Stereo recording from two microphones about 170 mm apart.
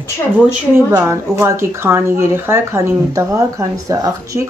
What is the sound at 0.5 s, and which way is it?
Speech, 15° right (ahead or behind).